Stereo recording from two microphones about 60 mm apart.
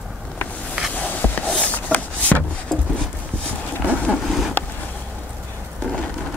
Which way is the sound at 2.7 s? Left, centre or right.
Centre.